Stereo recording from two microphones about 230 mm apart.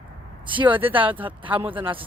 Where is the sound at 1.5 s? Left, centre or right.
Centre.